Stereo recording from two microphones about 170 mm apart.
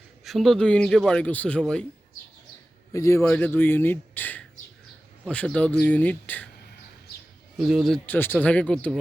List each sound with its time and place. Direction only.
0.3 s speech: centre (ahead or behind)
2.9 s a man's voice: 20° left (ahead or behind)
7.6 s speech: centre (ahead or behind)